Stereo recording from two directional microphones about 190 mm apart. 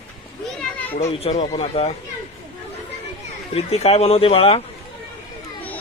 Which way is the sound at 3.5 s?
30° left (ahead or behind).